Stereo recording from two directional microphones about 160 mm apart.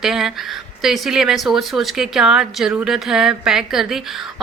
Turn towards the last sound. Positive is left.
turn(degrees=-5)  # may be behind; listen again after turning